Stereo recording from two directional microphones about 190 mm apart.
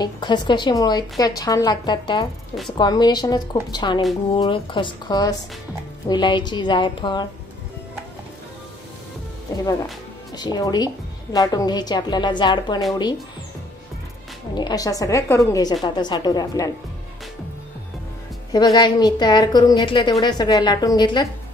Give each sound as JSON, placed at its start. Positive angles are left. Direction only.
{"t": 0.0, "sound": "a woman's voice", "side_deg": 25}
{"t": 10.3, "sound": "a woman's voice", "side_deg": 20}
{"t": 14.5, "sound": "a woman's voice", "side_deg": 20}
{"t": 18.5, "sound": "a woman's voice", "side_deg": 20}